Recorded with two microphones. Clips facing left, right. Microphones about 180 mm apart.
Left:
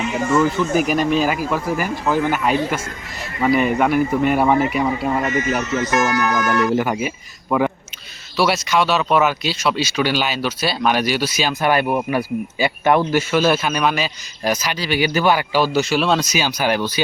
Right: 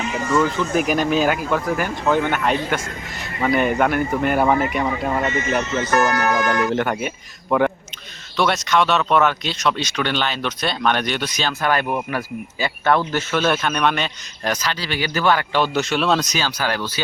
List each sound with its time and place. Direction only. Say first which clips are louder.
0.3 s speech: left 1 dB; centre (ahead or behind)
5.2 s speech: left 1 dB; 25° right (ahead or behind)
6.7 s speech: left 2 dB; 5° left (ahead or behind)
16.4 s speech: left 4 dB; 15° left (ahead or behind)